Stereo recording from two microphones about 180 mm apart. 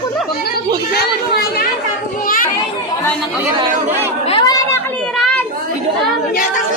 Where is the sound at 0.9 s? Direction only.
60° left (ahead or behind).